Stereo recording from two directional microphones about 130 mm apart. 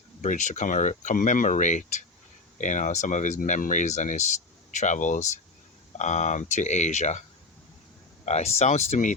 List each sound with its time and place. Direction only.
0.2 s speech: 70° left (ahead or behind)
8.2 s speech: 60° left (ahead or behind)